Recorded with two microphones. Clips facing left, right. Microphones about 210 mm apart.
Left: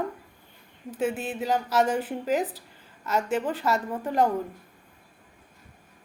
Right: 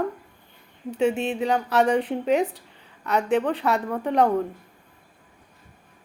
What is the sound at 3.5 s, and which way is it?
Speech, centre (ahead or behind).